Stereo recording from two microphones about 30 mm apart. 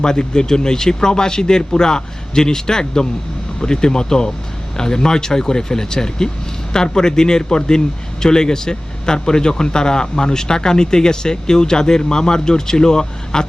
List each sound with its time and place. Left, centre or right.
0.0 s speech: left